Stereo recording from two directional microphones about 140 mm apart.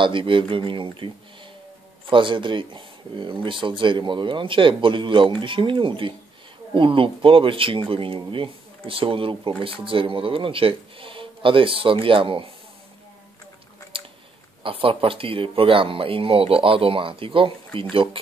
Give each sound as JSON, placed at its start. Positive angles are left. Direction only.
{"t": 0.0, "sound": "speech", "side_deg": -35}
{"t": 13.9, "sound": "chewing", "side_deg": -40}
{"t": 14.6, "sound": "speech", "side_deg": -40}